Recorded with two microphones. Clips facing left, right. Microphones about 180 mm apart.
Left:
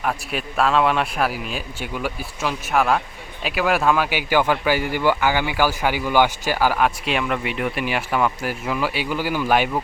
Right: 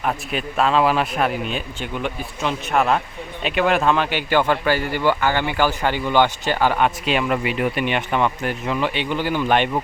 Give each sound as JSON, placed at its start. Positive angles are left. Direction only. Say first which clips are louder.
{"t": 0.0, "sound": "speech", "louder": "right 1 dB", "side_deg": 0}